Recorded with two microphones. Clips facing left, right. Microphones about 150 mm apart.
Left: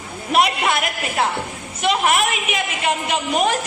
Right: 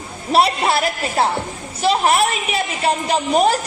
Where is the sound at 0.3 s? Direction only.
35° right (ahead or behind).